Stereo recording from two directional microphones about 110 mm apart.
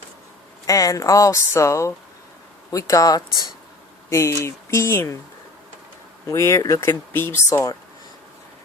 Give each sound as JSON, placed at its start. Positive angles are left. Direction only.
{"t": 0.7, "sound": "speech", "side_deg": 30}
{"t": 6.2, "sound": "speech", "side_deg": 25}